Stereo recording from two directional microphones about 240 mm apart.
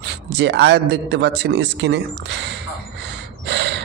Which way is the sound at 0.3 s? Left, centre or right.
Right.